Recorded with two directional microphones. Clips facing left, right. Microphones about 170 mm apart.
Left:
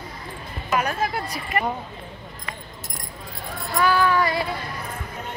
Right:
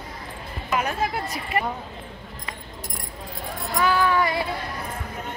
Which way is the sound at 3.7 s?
20° right (ahead or behind).